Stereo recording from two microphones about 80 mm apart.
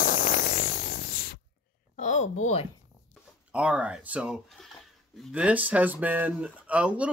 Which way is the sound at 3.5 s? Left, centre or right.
Centre.